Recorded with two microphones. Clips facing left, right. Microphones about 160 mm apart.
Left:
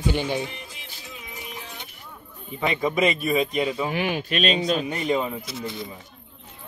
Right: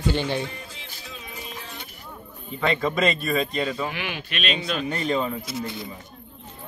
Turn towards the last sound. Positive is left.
turn(degrees=0)  # may be behind; listen again after turning